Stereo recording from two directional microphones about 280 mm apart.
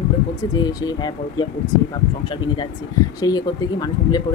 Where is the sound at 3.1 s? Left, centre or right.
Centre.